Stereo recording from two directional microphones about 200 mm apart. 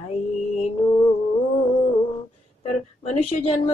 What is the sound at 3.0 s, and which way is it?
Mantra, 30° left (ahead or behind).